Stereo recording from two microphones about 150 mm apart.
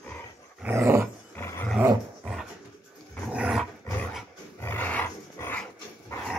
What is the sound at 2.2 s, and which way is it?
Dog, 5° right (ahead or behind).